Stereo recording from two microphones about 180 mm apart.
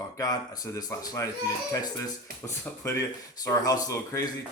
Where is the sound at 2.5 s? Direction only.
15° left (ahead or behind).